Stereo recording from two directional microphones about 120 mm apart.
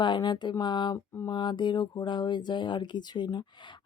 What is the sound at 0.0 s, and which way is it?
Speech, 40° left (ahead or behind).